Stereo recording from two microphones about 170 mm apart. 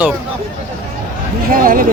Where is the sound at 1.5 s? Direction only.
55° right (ahead or behind).